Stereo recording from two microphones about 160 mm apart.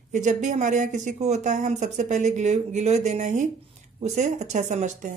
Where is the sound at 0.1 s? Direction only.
50° right (ahead or behind).